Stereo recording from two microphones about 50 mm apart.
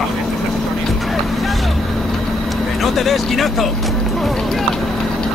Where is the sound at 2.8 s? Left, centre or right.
Centre.